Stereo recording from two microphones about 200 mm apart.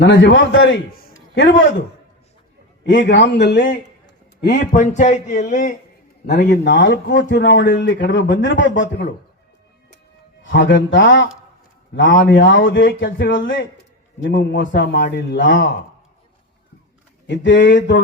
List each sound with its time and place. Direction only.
0.0 s a man's voice: 65° left (ahead or behind)
1.1 s a sound: 65° left (ahead or behind)
2.8 s a man's voice: 60° left (ahead or behind); by 5.7 s 40° left (ahead or behind)
6.2 s a man's voice: 55° left (ahead or behind)
10.4 s a man's voice: 65° left (ahead or behind)
17.2 s a man's voice: 60° left (ahead or behind)